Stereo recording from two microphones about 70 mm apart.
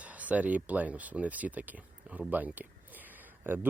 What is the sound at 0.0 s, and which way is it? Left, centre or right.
Speech, right.